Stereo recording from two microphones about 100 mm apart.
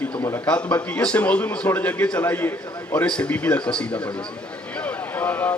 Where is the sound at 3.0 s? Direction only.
10° left (ahead or behind).